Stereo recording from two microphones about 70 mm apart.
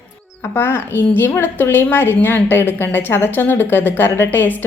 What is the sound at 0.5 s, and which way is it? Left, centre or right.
A woman's voice, left.